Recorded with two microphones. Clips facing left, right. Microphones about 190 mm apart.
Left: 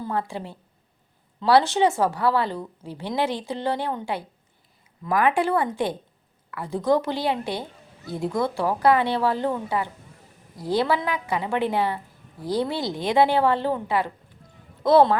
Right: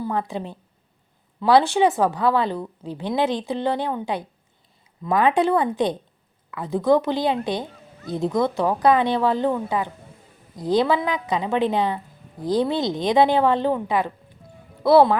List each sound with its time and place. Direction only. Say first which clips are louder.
0.0 s a woman's voice: right 2 dB; 15° right (ahead or behind)